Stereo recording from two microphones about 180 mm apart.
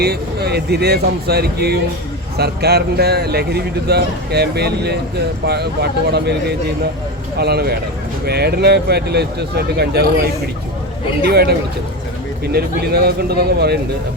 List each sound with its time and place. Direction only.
0.0 s a man's voice: 65° right (ahead or behind)
11.3 s a man's voice: 65° right (ahead or behind)